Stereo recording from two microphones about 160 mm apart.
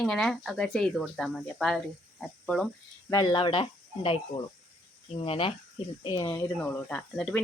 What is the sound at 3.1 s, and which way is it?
Speech, 25° left (ahead or behind).